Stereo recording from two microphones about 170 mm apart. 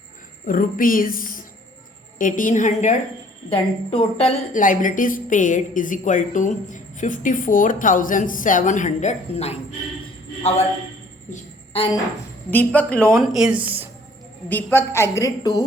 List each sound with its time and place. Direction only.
0.4 s a woman's voice: 55° left (ahead or behind)
3.5 s a woman's voice: 35° left (ahead or behind)
11.7 s speech: 35° left (ahead or behind)
12.5 s a woman's voice: 10° left (ahead or behind)
14.5 s a woman's voice: 15° left (ahead or behind)